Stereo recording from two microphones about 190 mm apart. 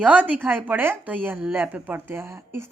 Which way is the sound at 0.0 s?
5° right (ahead or behind).